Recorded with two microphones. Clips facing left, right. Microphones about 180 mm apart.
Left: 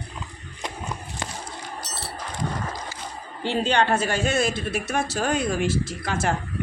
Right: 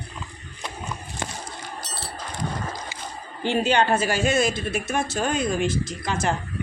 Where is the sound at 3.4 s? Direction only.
10° right (ahead or behind).